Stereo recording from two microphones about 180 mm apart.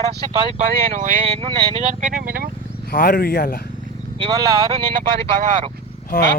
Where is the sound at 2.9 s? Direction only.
55° left (ahead or behind).